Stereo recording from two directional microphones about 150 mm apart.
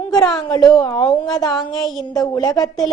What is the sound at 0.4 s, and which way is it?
A woman's voice, 30° left (ahead or behind).